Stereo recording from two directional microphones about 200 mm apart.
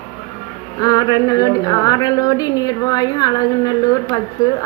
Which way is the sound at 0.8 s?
20° left (ahead or behind).